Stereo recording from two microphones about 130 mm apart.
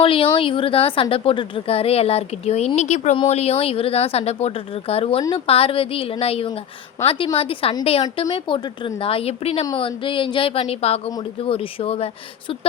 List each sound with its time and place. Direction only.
0.0 s speech: 45° left (ahead or behind)